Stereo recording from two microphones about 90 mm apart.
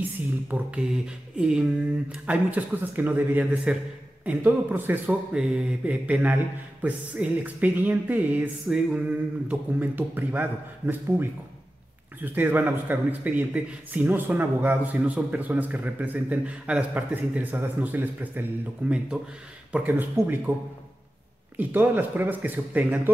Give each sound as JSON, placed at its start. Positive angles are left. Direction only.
{"t": 0.5, "sound": "a man's voice", "side_deg": -20}
{"t": 1.3, "sound": "a sound", "side_deg": -10}
{"t": 2.2, "sound": "a man's voice", "side_deg": -15}
{"t": 5.3, "sound": "a man's voice", "side_deg": -10}
{"t": 12.4, "sound": "a man's voice", "side_deg": -20}
{"t": 21.5, "sound": "a man's voice", "side_deg": -20}